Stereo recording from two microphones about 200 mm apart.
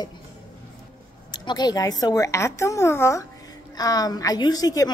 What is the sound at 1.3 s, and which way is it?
A woman's voice, 20° left (ahead or behind).